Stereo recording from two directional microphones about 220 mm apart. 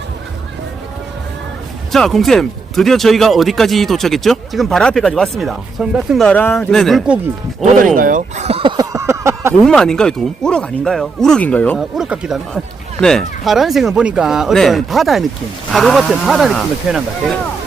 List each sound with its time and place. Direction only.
1.9 s speech: centre (ahead or behind)
7.6 s speech: 30° right (ahead or behind)
7.9 s a sound: 40° right (ahead or behind); by 9.6 s 10° right (ahead or behind)
9.6 s speech: 5° left (ahead or behind)